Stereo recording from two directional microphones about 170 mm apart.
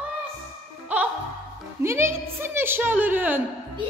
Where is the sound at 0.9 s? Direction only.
10° right (ahead or behind).